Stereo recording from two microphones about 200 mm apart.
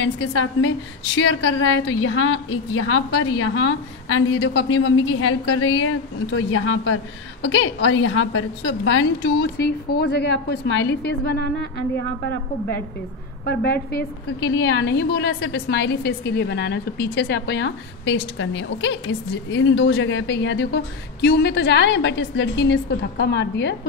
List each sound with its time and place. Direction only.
0.0 s a woman's voice: 70° left (ahead or behind)
7.4 s a woman's voice: 65° left (ahead or behind)
13.5 s a woman's voice: 55° left (ahead or behind)